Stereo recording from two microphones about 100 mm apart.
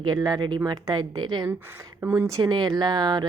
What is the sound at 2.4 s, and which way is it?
Speech, 45° right (ahead or behind).